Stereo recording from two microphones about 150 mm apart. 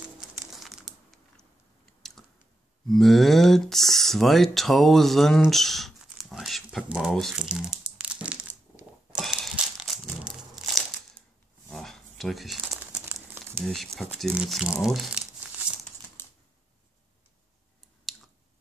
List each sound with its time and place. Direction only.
0.5 s crumpling: centre (ahead or behind)
2.0 s a sound: centre (ahead or behind)
2.9 s speech: centre (ahead or behind)
8.0 s crushing: 10° right (ahead or behind)
9.2 s crumpling: centre (ahead or behind)
11.7 s a sound: centre (ahead or behind)
13.1 s crumpling: 15° right (ahead or behind)
13.9 s speech: centre (ahead or behind)
16.2 s typewriter: 15° left (ahead or behind)
18.1 s squish: centre (ahead or behind)